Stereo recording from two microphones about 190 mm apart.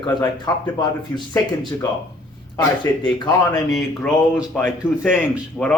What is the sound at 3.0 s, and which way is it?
Speech, 20° left (ahead or behind).